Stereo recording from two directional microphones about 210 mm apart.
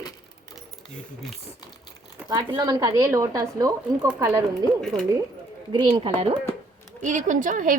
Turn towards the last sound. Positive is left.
turn(degrees=-40)  # may be behind; listen again after turning